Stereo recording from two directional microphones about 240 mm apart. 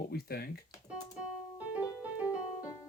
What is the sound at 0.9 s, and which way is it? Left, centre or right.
Keyboard, centre.